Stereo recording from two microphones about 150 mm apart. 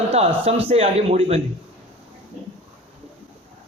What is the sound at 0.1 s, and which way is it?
A man's voice, 40° right (ahead or behind).